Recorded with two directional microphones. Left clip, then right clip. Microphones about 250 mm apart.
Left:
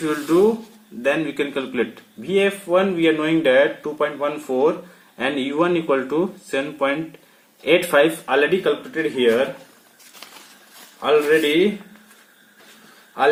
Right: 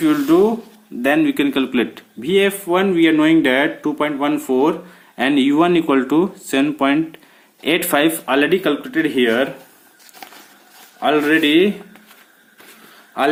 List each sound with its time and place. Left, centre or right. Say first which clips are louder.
0.0 s a man's voice: right 3 dB; right
11.0 s a man's voice: right 1 dB; right